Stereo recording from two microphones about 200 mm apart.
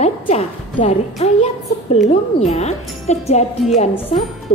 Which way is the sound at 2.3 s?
35° left (ahead or behind).